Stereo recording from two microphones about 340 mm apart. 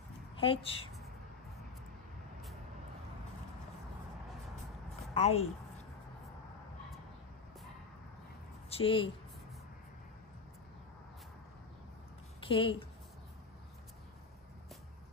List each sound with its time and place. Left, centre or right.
0.4 s speech: centre
5.1 s a sound: centre
8.6 s speech: centre
12.4 s speech: centre